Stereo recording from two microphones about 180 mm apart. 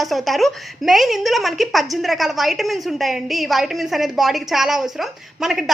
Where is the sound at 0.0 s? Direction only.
Centre (ahead or behind).